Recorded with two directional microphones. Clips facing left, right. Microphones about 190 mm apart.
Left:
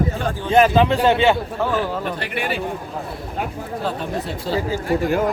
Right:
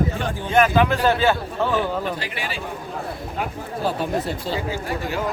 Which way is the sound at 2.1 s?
60° left (ahead or behind).